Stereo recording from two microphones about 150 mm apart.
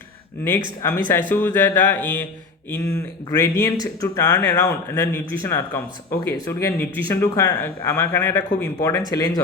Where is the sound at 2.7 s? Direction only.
20° left (ahead or behind).